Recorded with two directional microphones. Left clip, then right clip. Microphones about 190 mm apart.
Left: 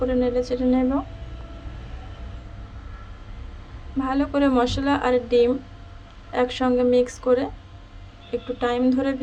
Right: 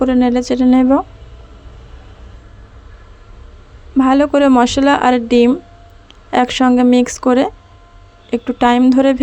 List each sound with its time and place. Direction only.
0.0 s speech: 45° right (ahead or behind)
3.9 s speech: 45° right (ahead or behind)